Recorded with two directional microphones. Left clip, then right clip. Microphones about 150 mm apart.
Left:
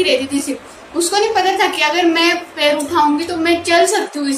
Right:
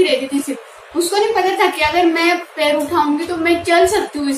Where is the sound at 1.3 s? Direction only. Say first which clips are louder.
Left 1 dB; 5° left (ahead or behind).